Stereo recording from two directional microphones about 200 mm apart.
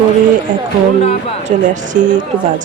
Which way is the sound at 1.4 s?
40° right (ahead or behind).